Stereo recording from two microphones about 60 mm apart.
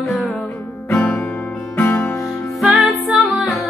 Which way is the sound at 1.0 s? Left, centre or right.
Left.